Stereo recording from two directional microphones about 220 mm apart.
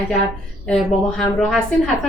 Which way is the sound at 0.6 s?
5° left (ahead or behind).